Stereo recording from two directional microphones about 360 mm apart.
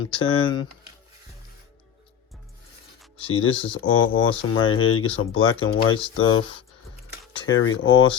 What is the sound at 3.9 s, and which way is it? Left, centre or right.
Speech, left.